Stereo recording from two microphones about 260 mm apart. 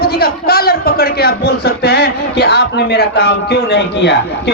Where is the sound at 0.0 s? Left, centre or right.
Left.